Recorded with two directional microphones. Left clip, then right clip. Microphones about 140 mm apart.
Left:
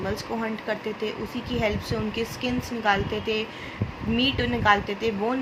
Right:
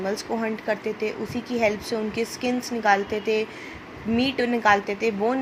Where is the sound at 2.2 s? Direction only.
35° right (ahead or behind).